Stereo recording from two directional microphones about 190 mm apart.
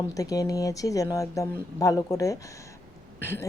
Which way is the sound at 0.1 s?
20° left (ahead or behind).